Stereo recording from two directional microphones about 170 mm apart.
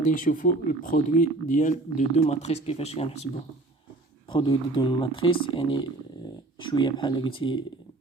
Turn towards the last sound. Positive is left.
turn(degrees=30)  # may be behind; listen again after turning